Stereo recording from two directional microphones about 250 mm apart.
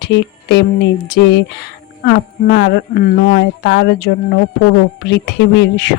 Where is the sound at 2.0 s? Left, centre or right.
Left.